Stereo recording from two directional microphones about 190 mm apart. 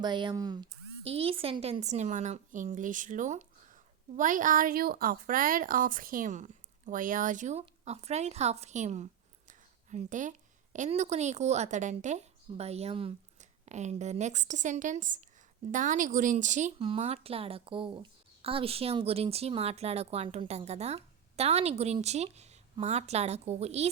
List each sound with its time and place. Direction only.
0.0 s a woman's voice: 25° right (ahead or behind)